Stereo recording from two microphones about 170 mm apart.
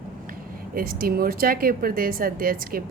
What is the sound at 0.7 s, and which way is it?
A woman's voice, 60° right (ahead or behind).